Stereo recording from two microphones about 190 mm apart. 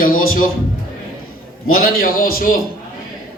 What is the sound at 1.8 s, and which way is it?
Speech, 50° left (ahead or behind).